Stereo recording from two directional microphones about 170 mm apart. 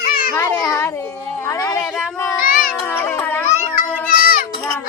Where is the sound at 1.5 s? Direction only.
20° left (ahead or behind).